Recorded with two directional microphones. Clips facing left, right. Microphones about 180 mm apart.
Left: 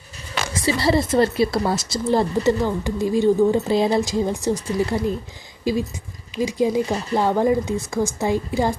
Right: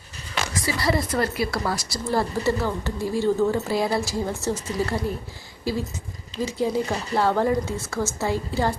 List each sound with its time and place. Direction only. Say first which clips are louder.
0.5 s speech: left 5 dB; 25° left (ahead or behind)